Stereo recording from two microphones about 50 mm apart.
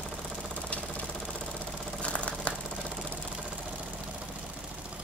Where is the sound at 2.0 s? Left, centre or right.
Left.